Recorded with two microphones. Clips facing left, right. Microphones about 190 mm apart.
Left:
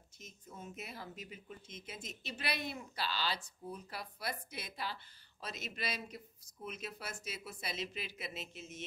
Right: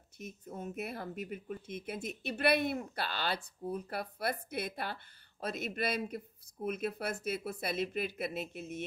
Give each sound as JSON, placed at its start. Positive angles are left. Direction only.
{"t": 0.2, "sound": "speech", "side_deg": -55}